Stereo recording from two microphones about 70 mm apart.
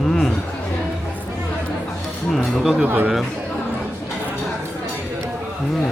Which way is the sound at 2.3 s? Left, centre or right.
Centre.